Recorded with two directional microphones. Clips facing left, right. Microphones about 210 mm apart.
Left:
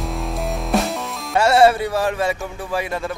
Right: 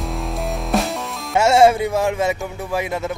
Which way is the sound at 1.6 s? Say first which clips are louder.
Right 1 dB; 15° right (ahead or behind).